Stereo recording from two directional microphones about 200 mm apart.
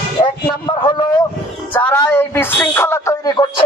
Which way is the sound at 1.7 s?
10° left (ahead or behind).